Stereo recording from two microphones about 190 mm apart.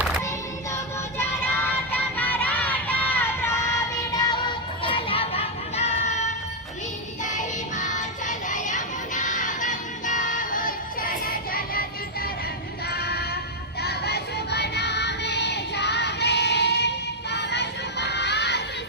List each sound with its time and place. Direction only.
1.2 s music: 10° left (ahead or behind); by 16.9 s 65° left (ahead or behind)
17.3 s crowd: 65° left (ahead or behind)